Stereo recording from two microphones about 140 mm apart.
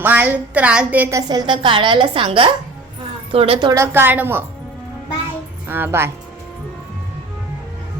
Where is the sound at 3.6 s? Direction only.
20° right (ahead or behind).